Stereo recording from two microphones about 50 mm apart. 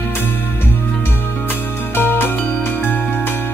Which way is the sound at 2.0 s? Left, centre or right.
Left.